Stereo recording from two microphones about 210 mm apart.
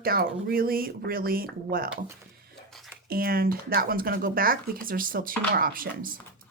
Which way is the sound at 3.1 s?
45° right (ahead or behind).